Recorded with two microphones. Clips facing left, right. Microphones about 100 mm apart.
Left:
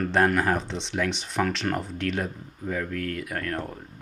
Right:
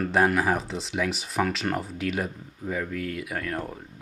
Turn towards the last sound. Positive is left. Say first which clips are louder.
# even
turn(degrees=-5)  # may be behind; listen again after turning